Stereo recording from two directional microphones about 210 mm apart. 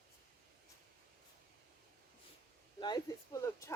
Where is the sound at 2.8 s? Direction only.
20° left (ahead or behind).